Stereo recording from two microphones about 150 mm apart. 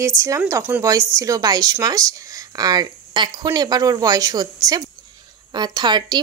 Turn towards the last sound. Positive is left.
turn(degrees=-30)  # may be behind; listen again after turning